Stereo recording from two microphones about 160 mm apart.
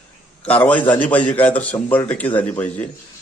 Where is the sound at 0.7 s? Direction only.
10° left (ahead or behind).